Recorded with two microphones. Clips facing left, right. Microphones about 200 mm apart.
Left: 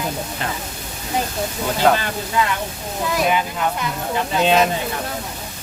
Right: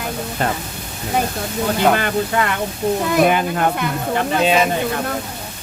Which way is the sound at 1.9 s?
60° right (ahead or behind).